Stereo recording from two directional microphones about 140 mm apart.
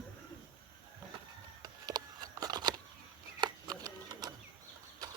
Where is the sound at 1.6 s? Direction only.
30° right (ahead or behind).